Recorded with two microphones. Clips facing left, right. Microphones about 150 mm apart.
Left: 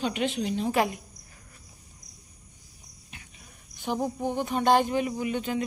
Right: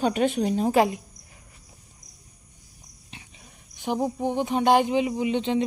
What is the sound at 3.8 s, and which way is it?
Speech, 15° right (ahead or behind).